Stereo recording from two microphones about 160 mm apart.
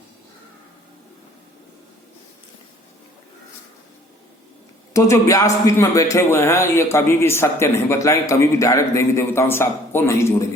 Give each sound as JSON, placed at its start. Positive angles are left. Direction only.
{"t": 4.9, "sound": "a man's voice", "side_deg": 20}